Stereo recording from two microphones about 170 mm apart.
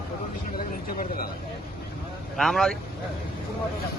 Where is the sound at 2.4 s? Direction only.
Centre (ahead or behind).